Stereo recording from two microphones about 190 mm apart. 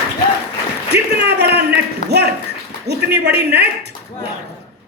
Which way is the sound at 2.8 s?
60° right (ahead or behind).